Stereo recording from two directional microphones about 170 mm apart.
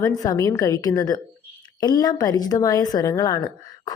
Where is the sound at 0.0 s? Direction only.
20° left (ahead or behind).